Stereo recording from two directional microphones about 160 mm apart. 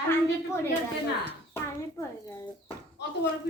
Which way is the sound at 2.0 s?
20° left (ahead or behind).